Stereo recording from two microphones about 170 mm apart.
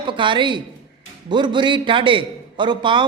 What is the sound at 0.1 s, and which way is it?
A man's voice, 30° right (ahead or behind).